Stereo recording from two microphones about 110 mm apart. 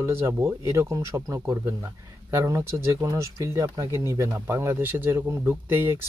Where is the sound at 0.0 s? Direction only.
20° right (ahead or behind).